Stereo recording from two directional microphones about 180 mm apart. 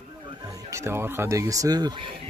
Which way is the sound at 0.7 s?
15° right (ahead or behind).